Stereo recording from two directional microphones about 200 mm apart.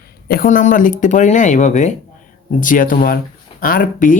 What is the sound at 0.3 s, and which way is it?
Speech, 45° left (ahead or behind).